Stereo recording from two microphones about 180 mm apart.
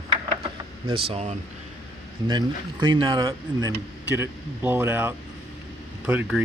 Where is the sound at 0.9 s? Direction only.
30° right (ahead or behind).